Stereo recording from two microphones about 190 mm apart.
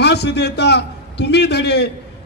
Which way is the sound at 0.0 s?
65° left (ahead or behind).